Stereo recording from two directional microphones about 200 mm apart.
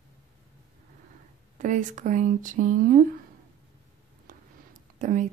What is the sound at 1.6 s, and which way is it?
Speech, 40° right (ahead or behind).